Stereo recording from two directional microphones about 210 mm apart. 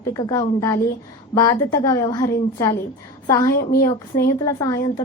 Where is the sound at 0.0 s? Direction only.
15° left (ahead or behind).